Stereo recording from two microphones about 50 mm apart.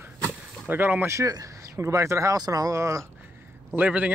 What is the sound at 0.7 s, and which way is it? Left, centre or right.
Speech, right.